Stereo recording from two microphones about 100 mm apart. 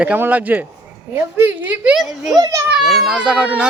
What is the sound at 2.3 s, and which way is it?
Speech, 35° right (ahead or behind).